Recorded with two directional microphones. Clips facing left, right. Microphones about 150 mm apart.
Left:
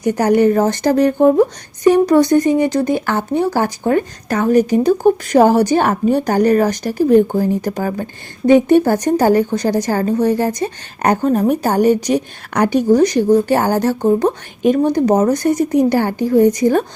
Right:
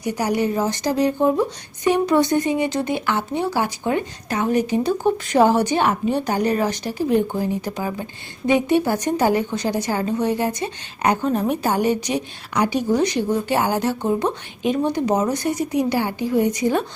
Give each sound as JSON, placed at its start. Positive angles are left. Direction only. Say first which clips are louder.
{"t": 0.0, "sound": "a woman's voice", "louder": "left 9 dB", "side_deg": 50}